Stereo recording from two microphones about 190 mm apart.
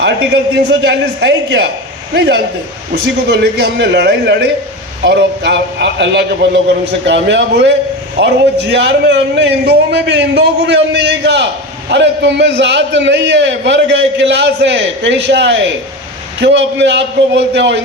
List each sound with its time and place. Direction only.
0.0 s a man's voice: 60° right (ahead or behind)